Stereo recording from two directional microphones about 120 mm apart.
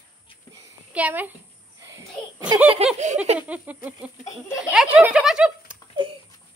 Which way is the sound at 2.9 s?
70° right (ahead or behind).